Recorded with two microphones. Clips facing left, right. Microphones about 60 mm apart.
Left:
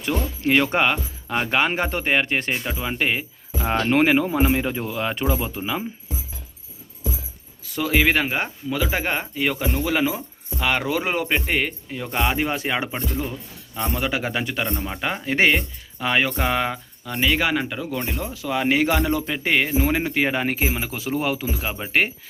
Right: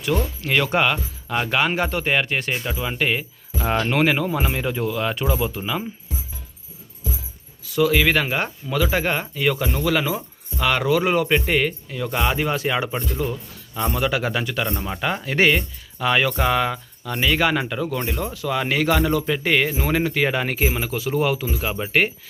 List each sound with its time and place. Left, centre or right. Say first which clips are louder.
0.1 s speech: left 2 dB; left
7.6 s speech: right 2 dB; left
12.9 s speech: right 2 dB; centre
13.9 s speech: right 2 dB; centre